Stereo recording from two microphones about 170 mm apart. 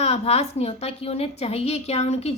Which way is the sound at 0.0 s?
35° left (ahead or behind).